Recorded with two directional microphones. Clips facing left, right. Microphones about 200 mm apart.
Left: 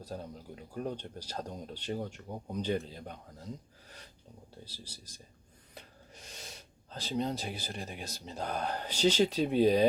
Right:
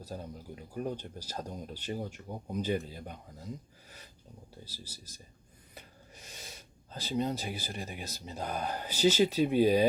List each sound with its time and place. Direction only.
0.0 s speech: 5° right (ahead or behind)
5.7 s snort: 5° right (ahead or behind)
6.9 s speech: 5° right (ahead or behind)